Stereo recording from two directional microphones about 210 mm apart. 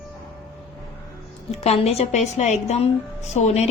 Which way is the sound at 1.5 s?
30° left (ahead or behind).